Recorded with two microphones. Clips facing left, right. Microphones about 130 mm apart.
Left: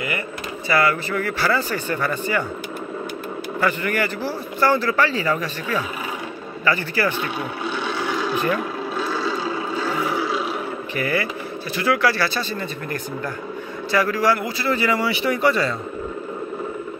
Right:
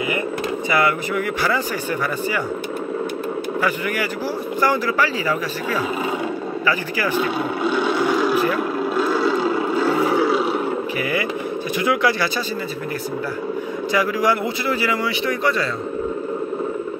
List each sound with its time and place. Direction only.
0.7 s speech: 15° right (ahead or behind)
3.6 s speech: 10° right (ahead or behind)
7.9 s a sound: 10° right (ahead or behind)
11.0 s speech: 15° right (ahead or behind)
13.9 s speech: 15° right (ahead or behind)
14.7 s speech: 5° right (ahead or behind)